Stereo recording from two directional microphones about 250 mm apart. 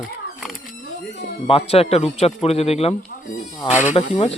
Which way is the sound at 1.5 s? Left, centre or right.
Left.